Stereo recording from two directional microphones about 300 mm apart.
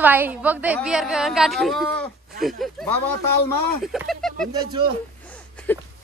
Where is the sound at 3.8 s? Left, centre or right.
Centre.